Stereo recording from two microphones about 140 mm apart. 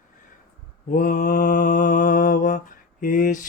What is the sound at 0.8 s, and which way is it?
Mantra, 80° left.